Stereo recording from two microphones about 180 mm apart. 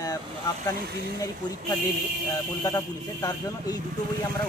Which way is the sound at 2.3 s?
20° left (ahead or behind).